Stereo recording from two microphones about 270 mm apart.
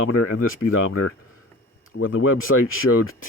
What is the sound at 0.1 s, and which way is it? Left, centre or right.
Speech, left.